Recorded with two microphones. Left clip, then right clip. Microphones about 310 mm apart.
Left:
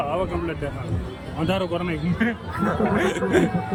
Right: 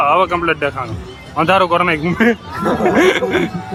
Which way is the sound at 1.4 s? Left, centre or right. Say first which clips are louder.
Right 13 dB; right.